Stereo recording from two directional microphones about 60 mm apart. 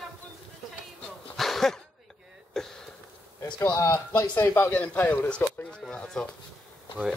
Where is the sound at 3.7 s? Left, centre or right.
Left.